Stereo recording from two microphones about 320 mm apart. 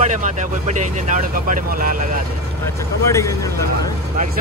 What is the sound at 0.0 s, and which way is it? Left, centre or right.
Speech, right.